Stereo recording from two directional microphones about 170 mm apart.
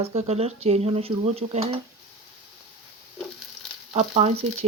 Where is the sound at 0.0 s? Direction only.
35° right (ahead or behind).